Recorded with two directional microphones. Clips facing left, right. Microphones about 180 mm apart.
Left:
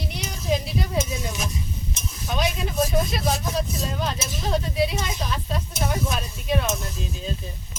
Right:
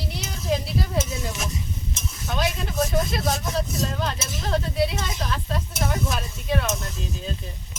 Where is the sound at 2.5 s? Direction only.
Centre (ahead or behind).